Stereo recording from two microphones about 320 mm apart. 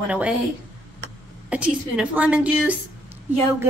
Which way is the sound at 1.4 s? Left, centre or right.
Centre.